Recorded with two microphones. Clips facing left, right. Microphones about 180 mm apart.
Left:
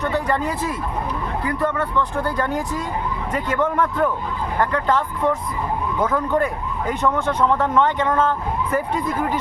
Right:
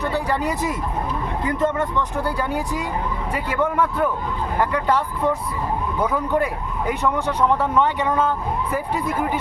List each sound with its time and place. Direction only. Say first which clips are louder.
0.0 s speech: left 1 dB; 10° right (ahead or behind)